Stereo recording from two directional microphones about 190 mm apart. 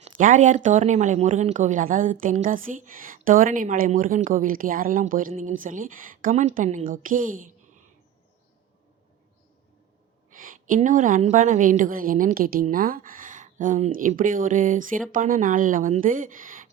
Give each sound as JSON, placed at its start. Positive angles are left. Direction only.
{"t": 0.0, "sound": "speech", "side_deg": -40}
{"t": 10.2, "sound": "a sound", "side_deg": -45}
{"t": 10.8, "sound": "speech", "side_deg": -40}